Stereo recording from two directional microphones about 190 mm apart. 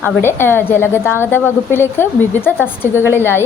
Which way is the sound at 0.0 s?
10° left (ahead or behind).